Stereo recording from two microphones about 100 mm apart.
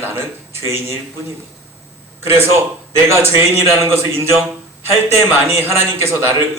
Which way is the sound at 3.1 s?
25° right (ahead or behind).